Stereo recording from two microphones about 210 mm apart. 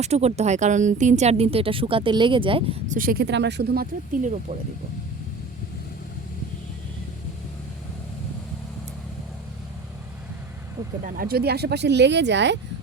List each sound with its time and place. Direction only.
0.0 s speech: 30° right (ahead or behind)
3.0 s speech: 45° right (ahead or behind)
11.0 s speech: 45° right (ahead or behind)